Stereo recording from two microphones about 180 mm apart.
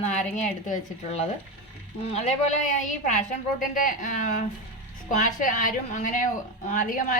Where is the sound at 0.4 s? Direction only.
45° left (ahead or behind).